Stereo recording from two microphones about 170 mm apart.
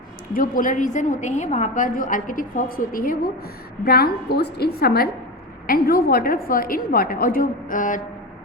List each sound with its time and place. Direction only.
0.3 s a woman's voice: 50° left (ahead or behind)